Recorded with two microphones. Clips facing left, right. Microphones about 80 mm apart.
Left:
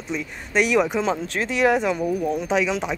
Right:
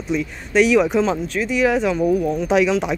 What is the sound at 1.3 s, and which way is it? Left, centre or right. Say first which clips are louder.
Speech: right 3 dB; left.